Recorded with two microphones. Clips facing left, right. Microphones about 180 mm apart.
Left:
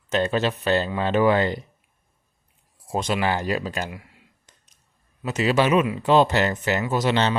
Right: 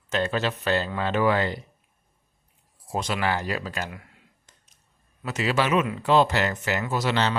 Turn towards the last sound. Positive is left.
turn(degrees=20)  # may be behind; listen again after turning